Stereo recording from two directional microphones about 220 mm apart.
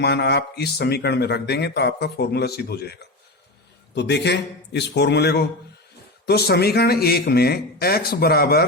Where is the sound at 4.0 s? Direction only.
50° left (ahead or behind).